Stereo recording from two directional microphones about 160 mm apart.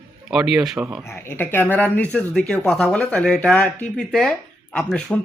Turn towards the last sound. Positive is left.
turn(degrees=5)  # may be behind; listen again after turning